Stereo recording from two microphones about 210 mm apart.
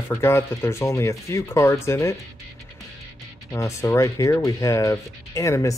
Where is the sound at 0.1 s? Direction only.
10° left (ahead or behind).